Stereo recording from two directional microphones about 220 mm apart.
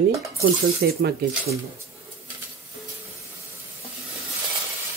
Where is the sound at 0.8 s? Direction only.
50° right (ahead or behind).